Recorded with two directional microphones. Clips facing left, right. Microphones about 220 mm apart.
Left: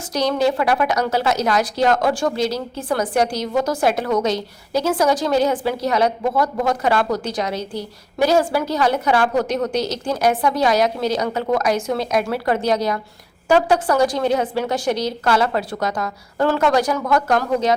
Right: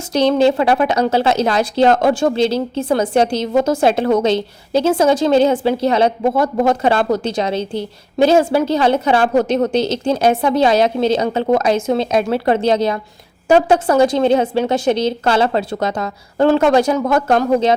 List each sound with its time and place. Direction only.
0.1 s a woman's voice: 25° right (ahead or behind)